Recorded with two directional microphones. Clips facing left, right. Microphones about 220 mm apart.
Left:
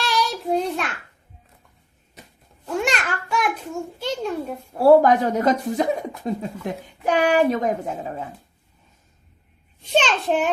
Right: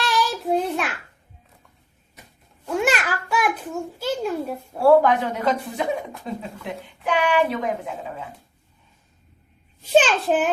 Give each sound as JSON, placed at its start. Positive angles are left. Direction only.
{"t": 0.0, "sound": "child singing", "side_deg": 0}
{"t": 2.6, "sound": "child singing", "side_deg": 0}
{"t": 4.0, "sound": "a sound", "side_deg": -5}
{"t": 4.8, "sound": "a woman's voice", "side_deg": 40}
{"t": 9.9, "sound": "a child's voice", "side_deg": -5}